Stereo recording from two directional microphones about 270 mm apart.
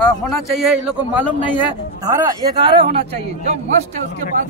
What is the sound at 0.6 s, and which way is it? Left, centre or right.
Speech, centre.